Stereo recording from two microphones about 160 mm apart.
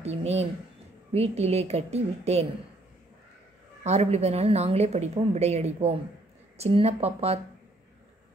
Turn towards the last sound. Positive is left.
turn(degrees=-40)  # may be behind; listen again after turning